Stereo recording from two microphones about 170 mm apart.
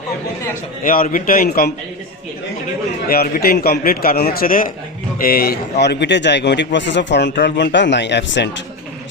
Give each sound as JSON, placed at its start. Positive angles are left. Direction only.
{"t": 0.9, "sound": "a man's voice", "side_deg": 55}
{"t": 3.1, "sound": "a man's voice", "side_deg": 65}